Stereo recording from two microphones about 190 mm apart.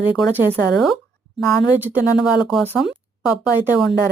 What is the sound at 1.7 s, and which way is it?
Speech, 10° right (ahead or behind).